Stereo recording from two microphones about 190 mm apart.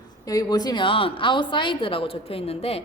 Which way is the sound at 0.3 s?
20° left (ahead or behind).